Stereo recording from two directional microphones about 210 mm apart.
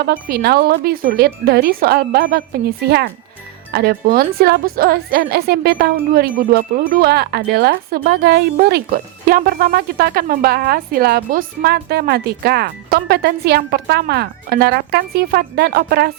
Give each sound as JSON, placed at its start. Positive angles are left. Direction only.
{"t": 0.0, "sound": "speech", "side_deg": -45}